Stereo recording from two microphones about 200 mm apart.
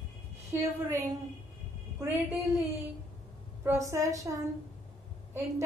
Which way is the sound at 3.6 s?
15° right (ahead or behind).